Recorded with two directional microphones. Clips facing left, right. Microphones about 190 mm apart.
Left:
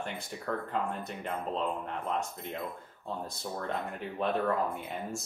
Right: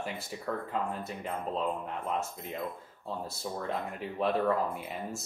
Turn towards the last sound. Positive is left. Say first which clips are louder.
# left 1 dB
turn(degrees=0)  # may be behind; listen again after turning